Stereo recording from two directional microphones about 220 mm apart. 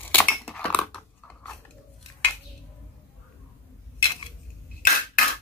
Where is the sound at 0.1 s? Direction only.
5° left (ahead or behind).